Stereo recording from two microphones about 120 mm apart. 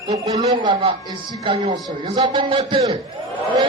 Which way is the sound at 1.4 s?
45° right (ahead or behind).